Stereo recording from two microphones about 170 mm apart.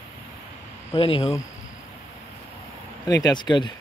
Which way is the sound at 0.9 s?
30° left (ahead or behind).